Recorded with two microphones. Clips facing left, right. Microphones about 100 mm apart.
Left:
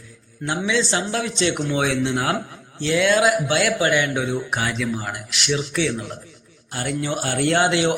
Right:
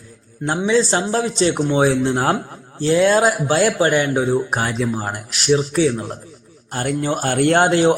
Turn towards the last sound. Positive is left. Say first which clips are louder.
# right 5 dB
turn(degrees=-40)  # may be behind; listen again after turning